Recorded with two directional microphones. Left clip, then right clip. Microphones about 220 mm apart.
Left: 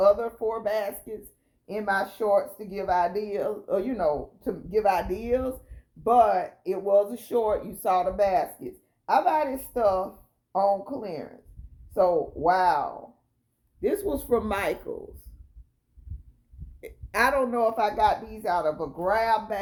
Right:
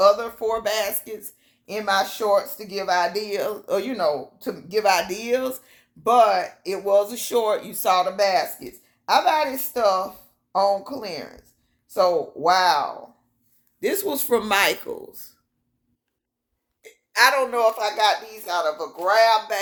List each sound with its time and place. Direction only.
0.0 s a sound: 20° right (ahead or behind)
0.4 s a woman's voice: 25° right (ahead or behind)
17.2 s speech: 25° right (ahead or behind)